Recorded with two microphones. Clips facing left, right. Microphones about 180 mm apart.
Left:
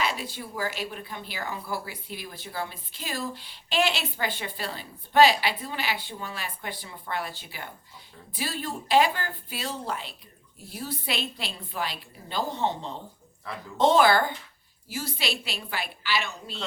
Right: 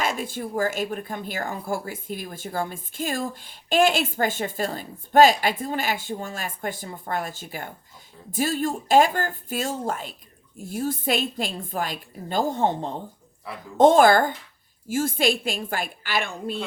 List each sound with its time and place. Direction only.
0.0 s a woman's voice: 50° right (ahead or behind)